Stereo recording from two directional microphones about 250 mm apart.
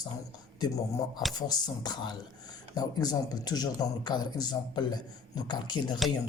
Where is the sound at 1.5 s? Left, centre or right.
Centre.